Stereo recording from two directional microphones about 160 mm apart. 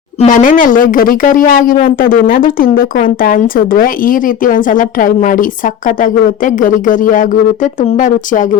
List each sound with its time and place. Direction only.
0.2 s speech: 55° left (ahead or behind)